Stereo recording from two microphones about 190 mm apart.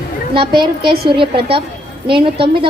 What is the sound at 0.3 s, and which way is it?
A woman's voice, 25° right (ahead or behind).